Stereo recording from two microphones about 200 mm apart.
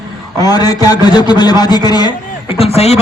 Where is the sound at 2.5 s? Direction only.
30° left (ahead or behind).